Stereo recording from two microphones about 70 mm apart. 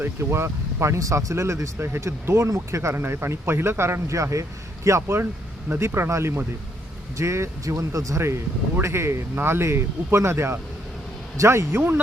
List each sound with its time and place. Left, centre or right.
0.0 s speech: right
2.9 s speech: right
5.2 s speech: right
5.8 s speech: right